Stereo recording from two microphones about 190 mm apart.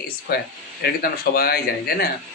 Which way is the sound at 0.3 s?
55° left (ahead or behind).